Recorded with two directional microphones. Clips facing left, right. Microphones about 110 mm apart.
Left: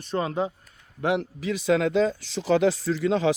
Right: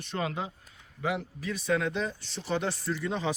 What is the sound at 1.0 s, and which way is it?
Speech, 80° left.